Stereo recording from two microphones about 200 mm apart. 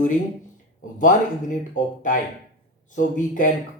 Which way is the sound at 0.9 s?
40° left (ahead or behind).